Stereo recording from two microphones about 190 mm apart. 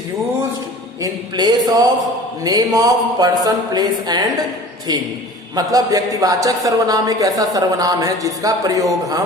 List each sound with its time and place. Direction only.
1.0 s speech: 20° right (ahead or behind)
5.5 s speech: 20° right (ahead or behind)